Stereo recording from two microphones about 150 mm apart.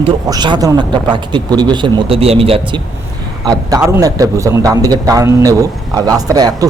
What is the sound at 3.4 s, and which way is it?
A man's voice, 25° right (ahead or behind).